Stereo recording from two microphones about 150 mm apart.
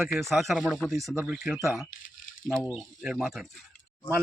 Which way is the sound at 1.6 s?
20° right (ahead or behind).